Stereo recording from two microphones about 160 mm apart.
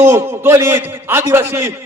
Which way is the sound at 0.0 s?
15° right (ahead or behind).